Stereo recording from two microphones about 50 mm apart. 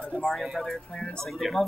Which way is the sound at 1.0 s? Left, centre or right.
Centre.